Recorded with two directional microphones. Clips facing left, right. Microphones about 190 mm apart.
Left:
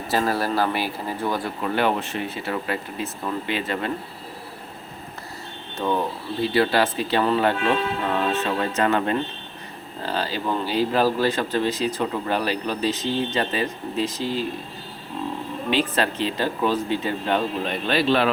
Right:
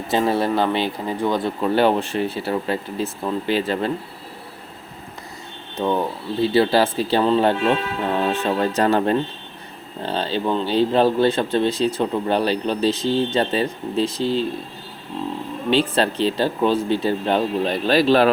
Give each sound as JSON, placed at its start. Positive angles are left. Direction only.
{"t": 0.1, "sound": "speech", "side_deg": -20}
{"t": 5.8, "sound": "speech", "side_deg": -25}
{"t": 15.7, "sound": "speech", "side_deg": -30}